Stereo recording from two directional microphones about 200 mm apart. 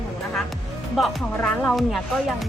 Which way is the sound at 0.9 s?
5° left (ahead or behind).